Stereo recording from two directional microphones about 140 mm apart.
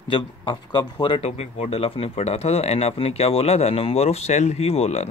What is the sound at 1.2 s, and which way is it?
Speech, 50° left (ahead or behind).